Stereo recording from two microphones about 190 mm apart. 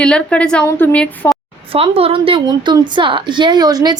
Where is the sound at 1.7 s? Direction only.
30° right (ahead or behind).